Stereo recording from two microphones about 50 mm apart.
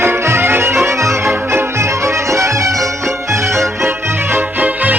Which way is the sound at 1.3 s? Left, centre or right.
Right.